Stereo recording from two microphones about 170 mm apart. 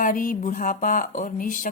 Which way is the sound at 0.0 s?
55° left (ahead or behind).